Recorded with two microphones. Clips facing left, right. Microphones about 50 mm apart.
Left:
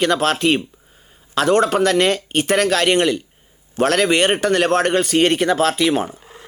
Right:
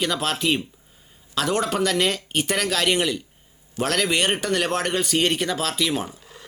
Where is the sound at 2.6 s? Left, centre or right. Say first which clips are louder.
Left 6 dB; left.